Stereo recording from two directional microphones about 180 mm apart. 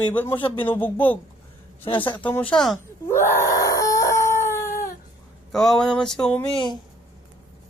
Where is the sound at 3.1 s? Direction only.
15° left (ahead or behind).